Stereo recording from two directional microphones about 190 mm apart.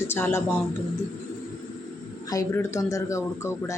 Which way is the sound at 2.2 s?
15° left (ahead or behind).